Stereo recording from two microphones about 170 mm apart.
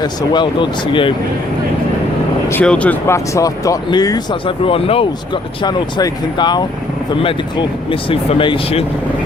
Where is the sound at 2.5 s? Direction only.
5° left (ahead or behind); by 8.8 s 30° left (ahead or behind).